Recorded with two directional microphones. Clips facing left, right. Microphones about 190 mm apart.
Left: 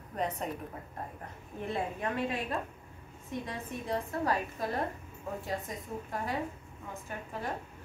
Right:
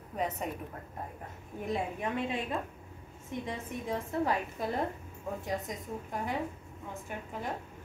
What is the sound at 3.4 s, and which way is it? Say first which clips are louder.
A woman's voice: right 1 dB; 15° right (ahead or behind).